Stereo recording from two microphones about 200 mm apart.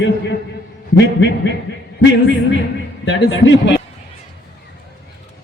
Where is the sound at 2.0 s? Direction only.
65° left (ahead or behind).